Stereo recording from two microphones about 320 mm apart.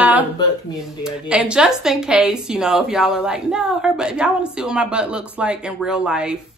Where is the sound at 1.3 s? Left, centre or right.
Centre.